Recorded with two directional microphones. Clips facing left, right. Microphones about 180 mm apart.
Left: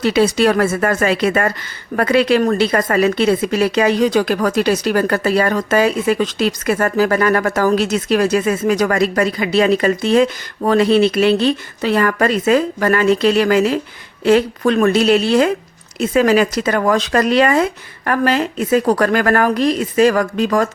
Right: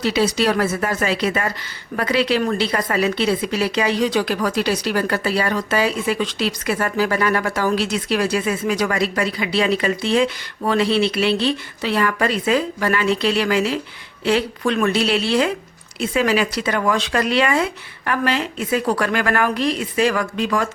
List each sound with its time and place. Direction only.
0.0 s speech: 50° left (ahead or behind)